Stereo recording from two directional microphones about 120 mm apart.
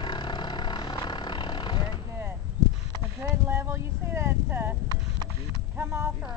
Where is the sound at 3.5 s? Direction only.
20° right (ahead or behind).